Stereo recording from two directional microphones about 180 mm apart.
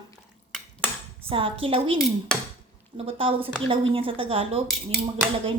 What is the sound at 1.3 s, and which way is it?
Speech, 30° right (ahead or behind).